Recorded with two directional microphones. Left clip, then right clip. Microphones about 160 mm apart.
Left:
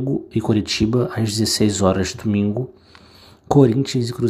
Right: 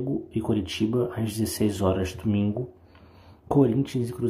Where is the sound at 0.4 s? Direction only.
30° left (ahead or behind).